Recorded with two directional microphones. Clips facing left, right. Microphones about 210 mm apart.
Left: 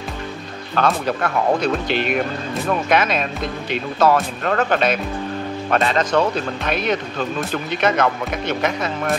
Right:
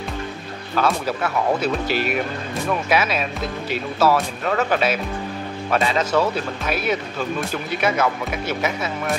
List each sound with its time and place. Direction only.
0.7 s speech: 5° right (ahead or behind)